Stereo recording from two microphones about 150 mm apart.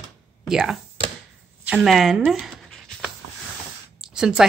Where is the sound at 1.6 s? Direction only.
5° right (ahead or behind).